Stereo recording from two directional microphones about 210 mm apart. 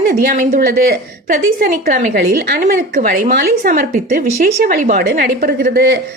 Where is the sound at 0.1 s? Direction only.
40° right (ahead or behind).